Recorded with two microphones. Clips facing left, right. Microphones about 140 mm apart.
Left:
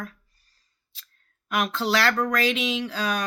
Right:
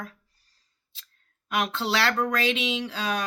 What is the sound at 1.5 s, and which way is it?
Speech, 25° right (ahead or behind).